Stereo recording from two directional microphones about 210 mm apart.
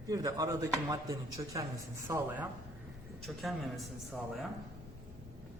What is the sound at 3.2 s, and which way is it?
A man's voice, centre (ahead or behind).